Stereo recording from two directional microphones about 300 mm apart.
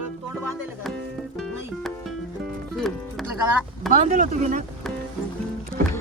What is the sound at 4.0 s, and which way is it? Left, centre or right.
Speech, right.